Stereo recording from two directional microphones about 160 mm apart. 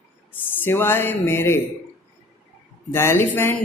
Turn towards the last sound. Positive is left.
turn(degrees=15)  # may be behind; listen again after turning